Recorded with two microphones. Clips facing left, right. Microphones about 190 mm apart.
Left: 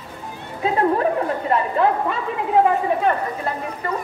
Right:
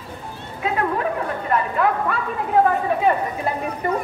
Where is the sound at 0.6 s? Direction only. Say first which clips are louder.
Left 4 dB; 30° left (ahead or behind).